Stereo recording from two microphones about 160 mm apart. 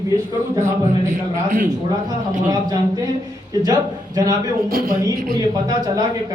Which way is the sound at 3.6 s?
20° right (ahead or behind).